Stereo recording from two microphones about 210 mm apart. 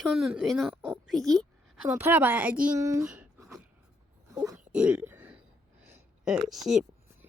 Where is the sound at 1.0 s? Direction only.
Centre (ahead or behind).